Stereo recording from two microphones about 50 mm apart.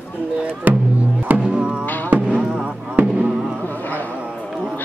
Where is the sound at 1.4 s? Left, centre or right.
Centre.